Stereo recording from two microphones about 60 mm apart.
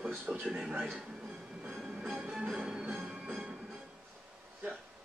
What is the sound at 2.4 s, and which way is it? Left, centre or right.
Music, centre.